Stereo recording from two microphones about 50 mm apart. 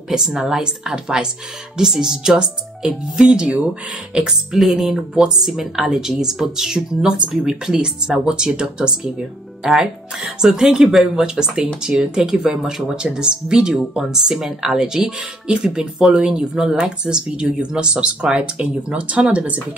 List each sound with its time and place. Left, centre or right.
0.1 s speech: centre; by 19.6 s right